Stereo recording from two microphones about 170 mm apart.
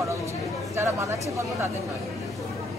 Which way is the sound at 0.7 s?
15° right (ahead or behind).